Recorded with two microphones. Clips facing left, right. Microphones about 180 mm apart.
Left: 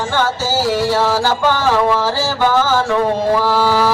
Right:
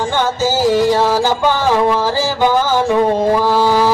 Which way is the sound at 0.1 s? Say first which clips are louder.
Even; 15° right (ahead or behind).